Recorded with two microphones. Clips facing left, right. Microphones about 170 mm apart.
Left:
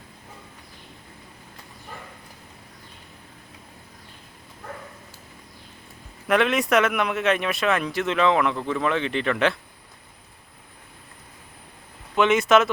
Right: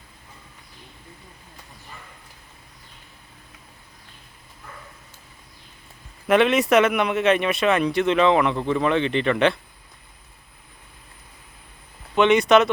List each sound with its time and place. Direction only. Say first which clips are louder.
6.2 s speech: right 3 dB; centre (ahead or behind)
8.5 s speech: right 4 dB; 20° right (ahead or behind)
8.8 s speech: right 3 dB; 5° left (ahead or behind)
12.1 s speech: right 2 dB; centre (ahead or behind)